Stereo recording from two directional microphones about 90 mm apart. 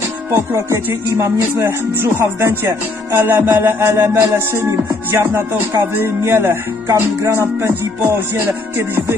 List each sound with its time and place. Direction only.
0.3 s music: 30° right (ahead or behind)